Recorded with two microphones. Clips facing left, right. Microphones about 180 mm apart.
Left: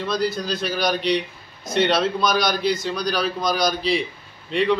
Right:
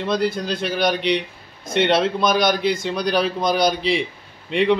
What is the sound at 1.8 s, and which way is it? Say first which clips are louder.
Speech: right 2 dB; 25° right (ahead or behind).